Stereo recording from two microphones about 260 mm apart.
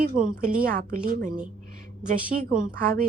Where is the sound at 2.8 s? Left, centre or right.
Right.